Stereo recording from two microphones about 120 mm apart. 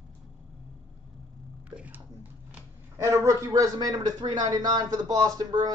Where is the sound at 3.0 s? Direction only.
25° right (ahead or behind).